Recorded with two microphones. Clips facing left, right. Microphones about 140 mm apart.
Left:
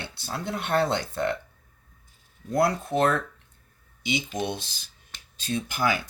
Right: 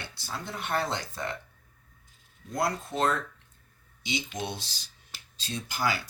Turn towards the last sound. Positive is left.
turn(degrees=55)  # may be behind; listen again after turning